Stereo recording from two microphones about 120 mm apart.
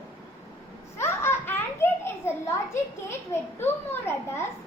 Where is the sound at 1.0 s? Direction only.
20° left (ahead or behind).